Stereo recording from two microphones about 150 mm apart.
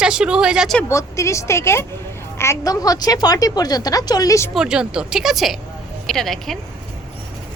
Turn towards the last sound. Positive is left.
turn(degrees=0)  # may be behind; listen again after turning